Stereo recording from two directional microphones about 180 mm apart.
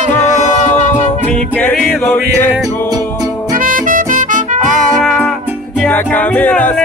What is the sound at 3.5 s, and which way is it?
Music, 50° right (ahead or behind).